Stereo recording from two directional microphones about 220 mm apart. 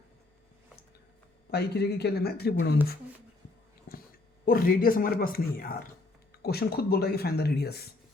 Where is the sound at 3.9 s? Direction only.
45° left (ahead or behind).